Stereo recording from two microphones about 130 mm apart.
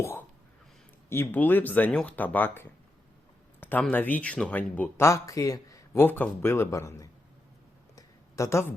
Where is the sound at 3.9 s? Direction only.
10° left (ahead or behind).